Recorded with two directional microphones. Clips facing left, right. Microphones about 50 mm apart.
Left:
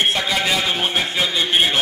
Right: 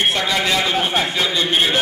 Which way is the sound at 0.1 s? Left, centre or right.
Centre.